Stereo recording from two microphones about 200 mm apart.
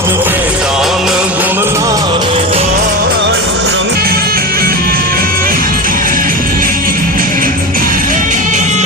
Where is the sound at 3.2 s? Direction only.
60° right (ahead or behind).